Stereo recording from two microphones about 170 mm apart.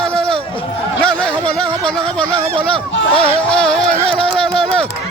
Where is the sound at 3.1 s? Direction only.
35° right (ahead or behind).